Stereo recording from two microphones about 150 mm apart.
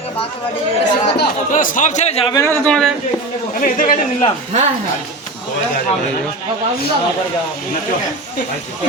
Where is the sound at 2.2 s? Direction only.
25° left (ahead or behind).